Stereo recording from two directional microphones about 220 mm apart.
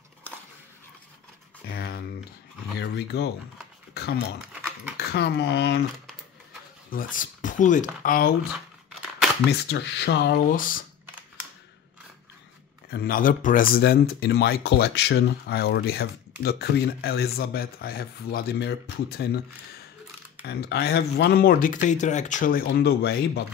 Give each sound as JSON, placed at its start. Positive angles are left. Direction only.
{"t": 1.7, "sound": "a sound", "side_deg": 45}
{"t": 2.8, "sound": "speech", "side_deg": 50}
{"t": 3.9, "sound": "a sound", "side_deg": 45}
{"t": 4.9, "sound": "speech", "side_deg": 45}
{"t": 6.9, "sound": "speech", "side_deg": 40}
{"t": 9.5, "sound": "speech", "side_deg": 55}
{"t": 12.9, "sound": "speech", "side_deg": 40}
{"t": 20.4, "sound": "speech", "side_deg": 45}